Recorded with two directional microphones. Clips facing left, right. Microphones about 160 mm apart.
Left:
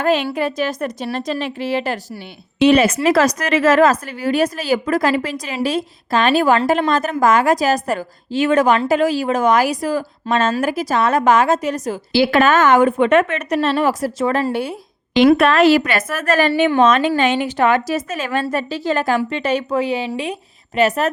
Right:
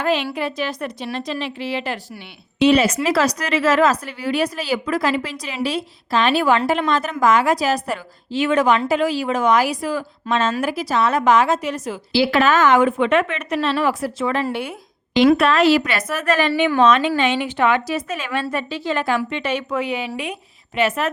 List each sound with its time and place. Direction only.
0.0 s a woman's voice: 45° left (ahead or behind)
14.4 s a woman's voice: 35° left (ahead or behind)
15.4 s a woman's voice: 50° left (ahead or behind)